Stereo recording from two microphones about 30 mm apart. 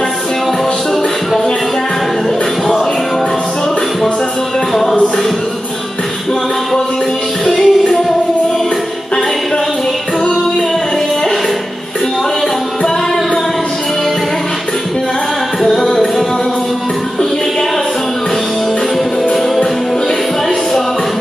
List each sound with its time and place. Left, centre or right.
7.4 s music: centre
15.6 s music: centre